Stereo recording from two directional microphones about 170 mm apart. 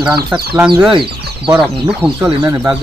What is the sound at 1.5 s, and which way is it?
Speech, 5° right (ahead or behind).